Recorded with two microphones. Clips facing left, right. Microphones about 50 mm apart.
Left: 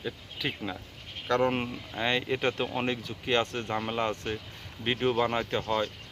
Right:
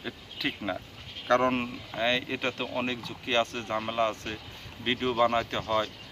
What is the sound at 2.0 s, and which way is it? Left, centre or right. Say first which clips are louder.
Speech: left 1 dB; centre.